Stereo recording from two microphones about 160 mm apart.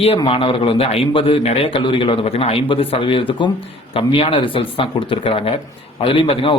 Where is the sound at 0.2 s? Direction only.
30° left (ahead or behind).